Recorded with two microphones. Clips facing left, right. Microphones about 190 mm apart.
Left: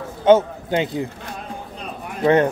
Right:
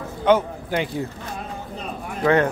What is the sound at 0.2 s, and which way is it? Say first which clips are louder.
Speech: left 4 dB; 25° left (ahead or behind).